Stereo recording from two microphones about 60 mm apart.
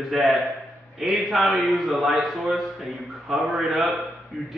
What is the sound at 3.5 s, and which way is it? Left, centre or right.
Speech, centre.